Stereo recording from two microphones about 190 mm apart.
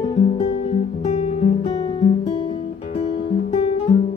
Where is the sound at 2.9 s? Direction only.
35° left (ahead or behind).